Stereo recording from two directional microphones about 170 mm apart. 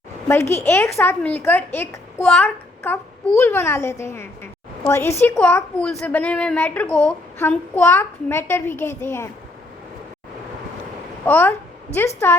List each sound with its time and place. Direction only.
0.5 s speech: 15° left (ahead or behind)
11.3 s speech: 10° left (ahead or behind)